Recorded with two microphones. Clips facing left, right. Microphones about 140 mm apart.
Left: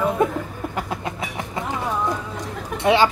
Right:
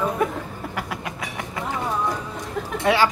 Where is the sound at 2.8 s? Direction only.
20° left (ahead or behind).